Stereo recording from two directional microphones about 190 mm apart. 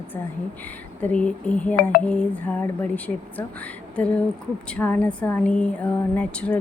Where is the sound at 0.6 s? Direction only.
10° left (ahead or behind).